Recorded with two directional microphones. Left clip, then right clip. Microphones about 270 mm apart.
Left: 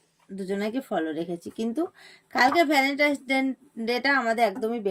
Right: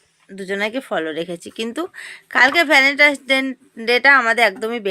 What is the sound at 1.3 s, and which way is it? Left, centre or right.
Speech, centre.